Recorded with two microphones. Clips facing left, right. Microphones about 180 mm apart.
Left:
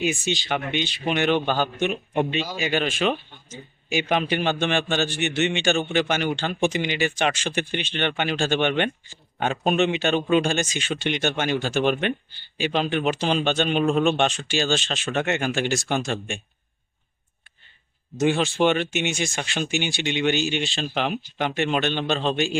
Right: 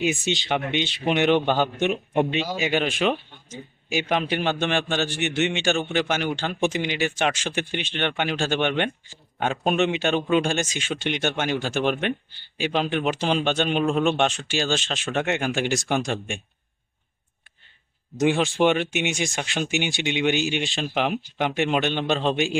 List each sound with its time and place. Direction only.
0.0 s speech: 20° right (ahead or behind)
3.5 s a man's voice: 5° right (ahead or behind)
18.3 s a man's voice: centre (ahead or behind)
18.6 s speech: 10° right (ahead or behind)